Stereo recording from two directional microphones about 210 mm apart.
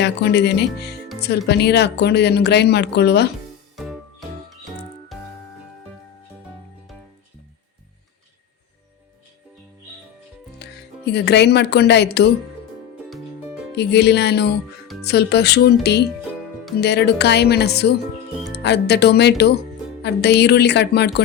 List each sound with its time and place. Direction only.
0.0 s speech: 55° left (ahead or behind)
5.1 s music: centre (ahead or behind)
10.6 s speech: 55° left (ahead or behind)
13.1 s music: centre (ahead or behind)
13.7 s speech: 55° left (ahead or behind)